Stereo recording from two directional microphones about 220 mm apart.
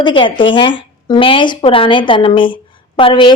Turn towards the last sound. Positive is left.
turn(degrees=20)  # may be behind; listen again after turning